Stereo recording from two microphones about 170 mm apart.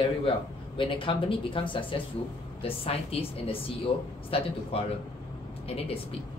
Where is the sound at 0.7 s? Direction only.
30° left (ahead or behind).